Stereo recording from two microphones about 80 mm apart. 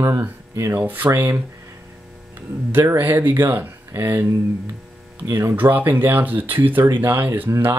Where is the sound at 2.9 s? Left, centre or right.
Right.